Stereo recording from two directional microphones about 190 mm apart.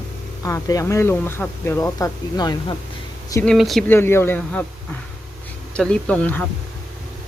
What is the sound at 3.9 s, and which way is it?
Speech, 10° left (ahead or behind).